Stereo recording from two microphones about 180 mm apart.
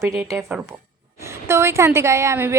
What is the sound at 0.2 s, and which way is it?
A woman's voice, 15° right (ahead or behind).